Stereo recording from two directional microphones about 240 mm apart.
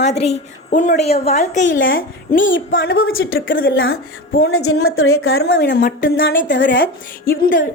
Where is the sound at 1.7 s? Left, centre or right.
Left.